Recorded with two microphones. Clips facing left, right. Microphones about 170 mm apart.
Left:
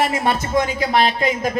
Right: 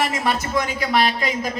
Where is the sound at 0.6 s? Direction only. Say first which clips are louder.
Left 4 dB; 45° left (ahead or behind).